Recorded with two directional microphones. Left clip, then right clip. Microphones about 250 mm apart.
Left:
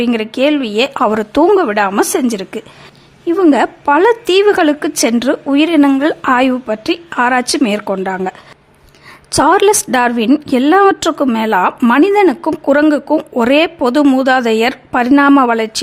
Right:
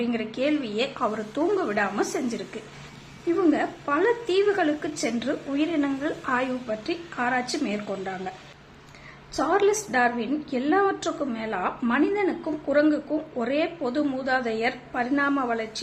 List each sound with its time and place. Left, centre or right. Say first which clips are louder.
0.0 s a woman's voice: left 13 dB; left
3.5 s a woman's voice: left 14 dB; left
9.3 s a woman's voice: left 13 dB; left